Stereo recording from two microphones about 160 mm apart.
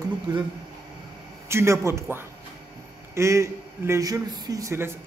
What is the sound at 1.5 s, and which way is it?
A man's voice, 15° right (ahead or behind).